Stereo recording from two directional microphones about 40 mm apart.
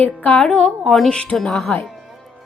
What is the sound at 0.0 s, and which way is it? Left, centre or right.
Speech, left.